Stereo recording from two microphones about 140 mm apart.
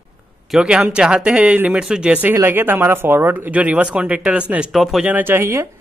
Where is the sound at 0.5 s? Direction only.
5° right (ahead or behind).